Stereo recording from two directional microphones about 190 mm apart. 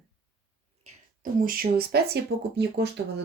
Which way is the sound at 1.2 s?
50° right (ahead or behind).